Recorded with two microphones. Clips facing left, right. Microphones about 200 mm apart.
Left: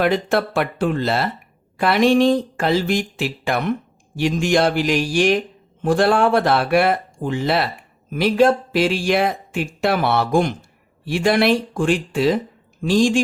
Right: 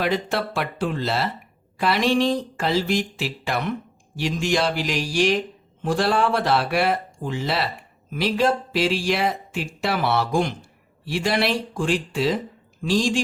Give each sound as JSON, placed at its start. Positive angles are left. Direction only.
{"t": 0.0, "sound": "speech", "side_deg": 55}